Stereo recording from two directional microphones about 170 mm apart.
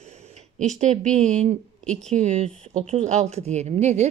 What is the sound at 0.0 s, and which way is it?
A woman's voice, 40° right (ahead or behind).